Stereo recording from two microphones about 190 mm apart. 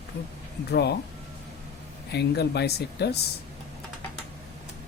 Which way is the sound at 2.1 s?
60° left (ahead or behind).